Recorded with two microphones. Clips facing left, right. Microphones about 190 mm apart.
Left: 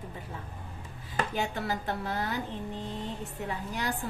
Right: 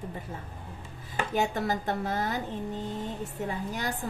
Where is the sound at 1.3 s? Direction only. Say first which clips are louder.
Right 8 dB; 45° right (ahead or behind).